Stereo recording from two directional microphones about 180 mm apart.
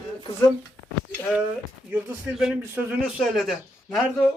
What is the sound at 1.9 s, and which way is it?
A man's voice, 5° right (ahead or behind).